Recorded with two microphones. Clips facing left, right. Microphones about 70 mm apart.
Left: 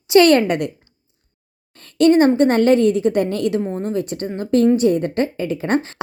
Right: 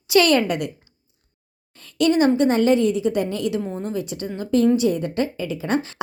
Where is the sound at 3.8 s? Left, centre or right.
Left.